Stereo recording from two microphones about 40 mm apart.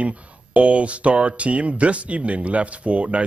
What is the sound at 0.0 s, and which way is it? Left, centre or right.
Speech, right.